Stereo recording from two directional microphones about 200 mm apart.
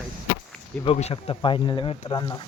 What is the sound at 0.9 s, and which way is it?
Speech, 30° left (ahead or behind).